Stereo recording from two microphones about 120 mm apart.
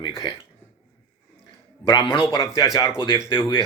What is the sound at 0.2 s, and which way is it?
Speech, 40° left (ahead or behind).